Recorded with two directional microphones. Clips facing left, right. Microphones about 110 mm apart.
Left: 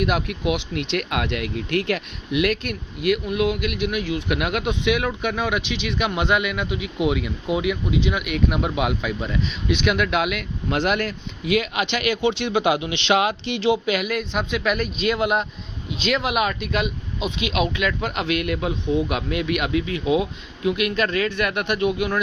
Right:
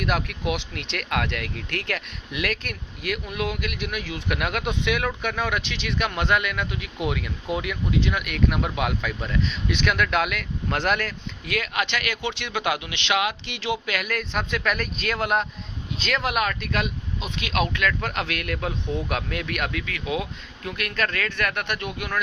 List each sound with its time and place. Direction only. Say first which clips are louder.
0.0 s speech: left 4 dB; 10° left (ahead or behind)
19.7 s speech: left 8 dB; 25° left (ahead or behind)